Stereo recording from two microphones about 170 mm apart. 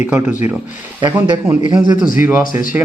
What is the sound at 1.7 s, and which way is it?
Speech, 25° right (ahead or behind).